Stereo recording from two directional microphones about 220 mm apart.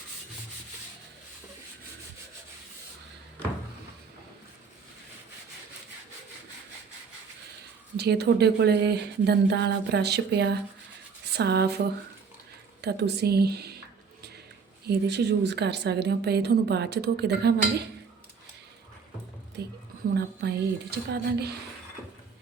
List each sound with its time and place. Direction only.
7.9 s a woman's voice: 50° right (ahead or behind)
12.8 s a woman's voice: 50° right (ahead or behind)
14.8 s a woman's voice: 50° right (ahead or behind)
19.6 s a woman's voice: 50° right (ahead or behind)